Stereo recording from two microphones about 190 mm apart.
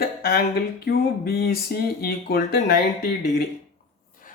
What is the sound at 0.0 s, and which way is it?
Speech, 55° left (ahead or behind).